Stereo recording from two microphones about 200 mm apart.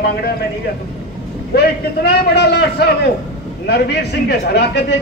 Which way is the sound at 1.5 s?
55° left (ahead or behind).